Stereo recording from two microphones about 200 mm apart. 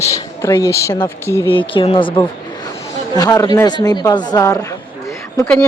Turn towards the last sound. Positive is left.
turn(degrees=10)  # may be behind; listen again after turning